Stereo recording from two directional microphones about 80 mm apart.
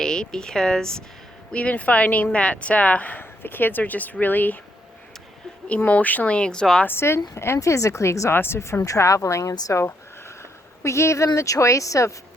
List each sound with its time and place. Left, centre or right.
0.0 s speech: centre
5.6 s speech: centre
6.8 s speech: left
10.8 s speech: left